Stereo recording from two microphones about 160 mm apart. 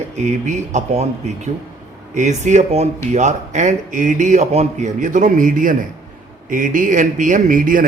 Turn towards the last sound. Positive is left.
turn(degrees=-55)  # may be behind; listen again after turning